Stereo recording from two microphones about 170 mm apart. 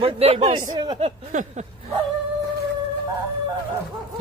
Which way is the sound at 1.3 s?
45° right (ahead or behind).